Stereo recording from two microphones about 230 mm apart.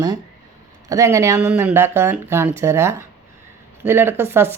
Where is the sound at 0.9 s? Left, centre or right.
Centre.